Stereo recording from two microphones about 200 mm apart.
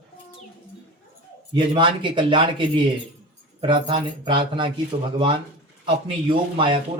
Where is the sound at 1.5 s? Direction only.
25° right (ahead or behind).